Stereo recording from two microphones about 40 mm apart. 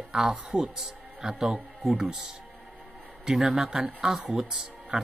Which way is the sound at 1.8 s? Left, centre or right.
Centre.